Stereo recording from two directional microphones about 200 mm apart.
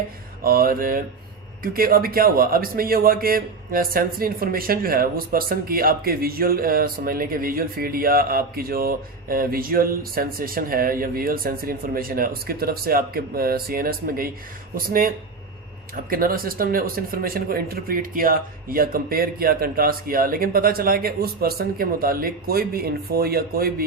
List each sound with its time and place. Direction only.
0.4 s a man's voice: 45° right (ahead or behind)